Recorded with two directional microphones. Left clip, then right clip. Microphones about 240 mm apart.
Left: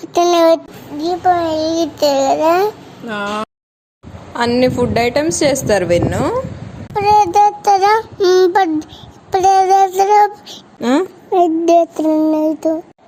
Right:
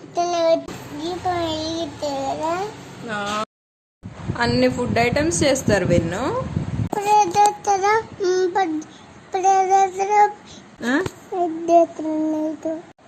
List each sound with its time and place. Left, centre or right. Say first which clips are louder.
0.1 s a sound: left 8 dB; left
1.0 s a child's voice: left 10 dB; left
3.1 s a woman's voice: left 4 dB; centre
7.1 s child singing: left 5 dB; left
9.3 s female singing: left 6 dB; left
10.8 s a woman's voice: left 7 dB; centre
11.3 s a child's voice: left 6 dB; left